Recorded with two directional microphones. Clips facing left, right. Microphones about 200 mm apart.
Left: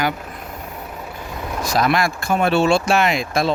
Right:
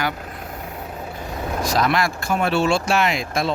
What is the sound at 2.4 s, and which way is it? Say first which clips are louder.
Speech: left 3 dB; 60° left (ahead or behind).